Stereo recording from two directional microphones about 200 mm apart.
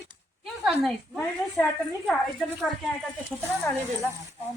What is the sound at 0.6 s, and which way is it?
Speech, centre (ahead or behind).